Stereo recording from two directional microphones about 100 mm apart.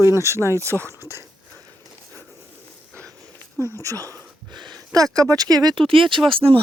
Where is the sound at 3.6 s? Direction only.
35° right (ahead or behind).